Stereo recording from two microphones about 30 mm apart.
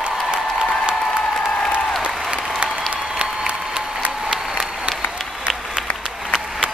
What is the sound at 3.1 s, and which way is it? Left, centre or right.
Applause, right.